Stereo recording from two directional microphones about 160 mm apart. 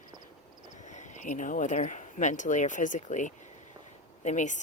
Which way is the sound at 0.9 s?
50° left (ahead or behind).